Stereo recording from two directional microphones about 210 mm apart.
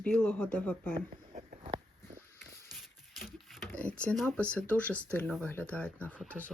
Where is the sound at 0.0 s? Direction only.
5° left (ahead or behind).